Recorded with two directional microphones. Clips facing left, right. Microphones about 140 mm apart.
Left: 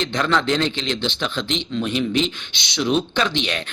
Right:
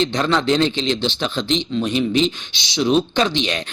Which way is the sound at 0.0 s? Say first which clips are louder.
Right 2 dB; 25° right (ahead or behind).